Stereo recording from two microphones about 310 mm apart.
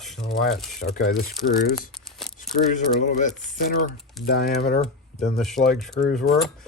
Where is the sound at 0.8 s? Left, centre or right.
Left.